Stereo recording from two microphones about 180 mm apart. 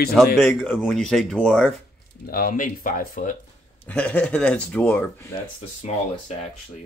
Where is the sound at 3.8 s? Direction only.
10° left (ahead or behind).